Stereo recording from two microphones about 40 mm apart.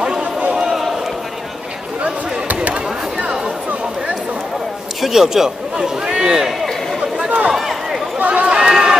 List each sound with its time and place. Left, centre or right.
0.2 s run: right
0.6 s basketball bounce: centre
3.2 s a sound: right
5.0 s a man's voice: centre
7.2 s run: right
7.5 s run: centre
8.2 s run: right
8.5 s run: centre